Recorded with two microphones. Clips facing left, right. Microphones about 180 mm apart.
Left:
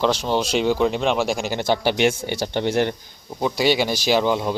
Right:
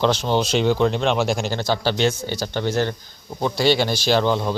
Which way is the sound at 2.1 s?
25° left (ahead or behind).